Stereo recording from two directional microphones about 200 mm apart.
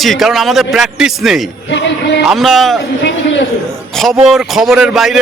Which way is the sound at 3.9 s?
Centre (ahead or behind).